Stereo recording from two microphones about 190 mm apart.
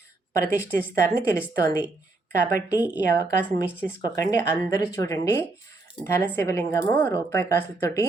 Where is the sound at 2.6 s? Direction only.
10° right (ahead or behind).